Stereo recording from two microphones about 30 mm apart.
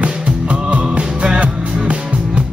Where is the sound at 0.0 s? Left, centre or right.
Right.